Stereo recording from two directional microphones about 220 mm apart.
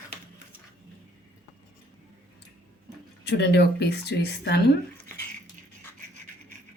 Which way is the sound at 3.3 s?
50° left (ahead or behind).